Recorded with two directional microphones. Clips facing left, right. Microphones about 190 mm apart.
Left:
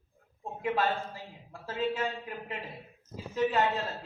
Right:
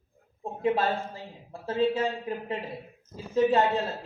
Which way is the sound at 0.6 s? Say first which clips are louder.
Right 4 dB; 30° right (ahead or behind).